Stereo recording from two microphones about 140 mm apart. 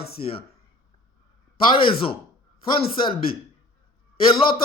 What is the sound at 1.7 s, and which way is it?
Speech, 40° left (ahead or behind).